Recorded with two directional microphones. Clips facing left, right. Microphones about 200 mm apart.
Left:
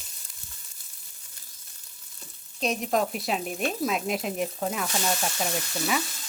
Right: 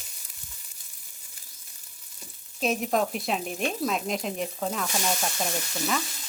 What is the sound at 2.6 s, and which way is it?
Speech, centre (ahead or behind).